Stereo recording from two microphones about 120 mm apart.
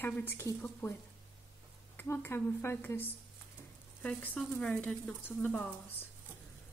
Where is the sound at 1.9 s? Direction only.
15° left (ahead or behind).